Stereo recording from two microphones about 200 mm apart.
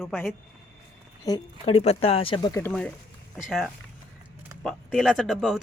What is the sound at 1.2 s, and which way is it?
Speech, 20° left (ahead or behind).